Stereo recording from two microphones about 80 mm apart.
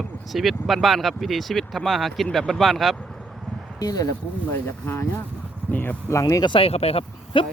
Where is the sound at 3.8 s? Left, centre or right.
Left.